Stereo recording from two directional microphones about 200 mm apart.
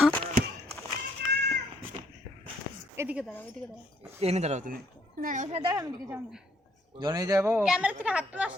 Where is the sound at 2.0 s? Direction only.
30° right (ahead or behind).